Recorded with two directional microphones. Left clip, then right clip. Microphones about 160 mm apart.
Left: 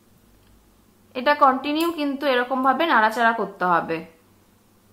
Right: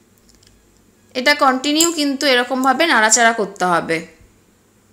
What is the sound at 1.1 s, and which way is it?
A woman's voice, 20° right (ahead or behind).